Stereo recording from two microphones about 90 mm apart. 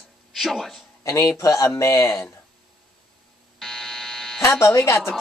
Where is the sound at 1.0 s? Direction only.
30° left (ahead or behind).